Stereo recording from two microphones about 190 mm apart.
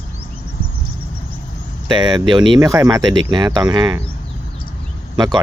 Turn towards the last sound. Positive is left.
turn(degrees=-20)  # may be behind; listen again after turning